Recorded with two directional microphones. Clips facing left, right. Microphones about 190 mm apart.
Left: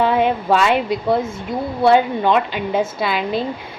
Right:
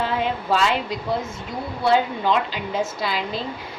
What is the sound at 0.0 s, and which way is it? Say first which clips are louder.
A woman's voice: left 7 dB; 55° left (ahead or behind).